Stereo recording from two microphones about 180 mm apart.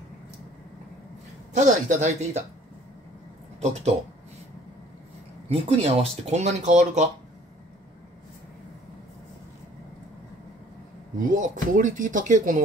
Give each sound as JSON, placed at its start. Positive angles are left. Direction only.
{"t": 1.5, "sound": "speech", "side_deg": -40}
{"t": 5.5, "sound": "speech", "side_deg": -35}
{"t": 11.2, "sound": "speech", "side_deg": -45}